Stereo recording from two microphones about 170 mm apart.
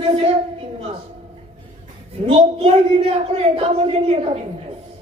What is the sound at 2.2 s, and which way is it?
A man's voice, 35° right (ahead or behind).